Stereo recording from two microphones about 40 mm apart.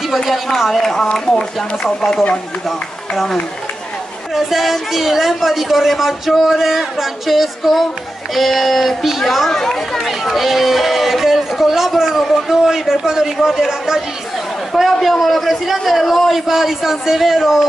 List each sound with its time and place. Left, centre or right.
0.1 s a woman's voice: centre
4.4 s a woman's voice: centre
9.5 s speech: centre
9.9 s a woman's voice: centre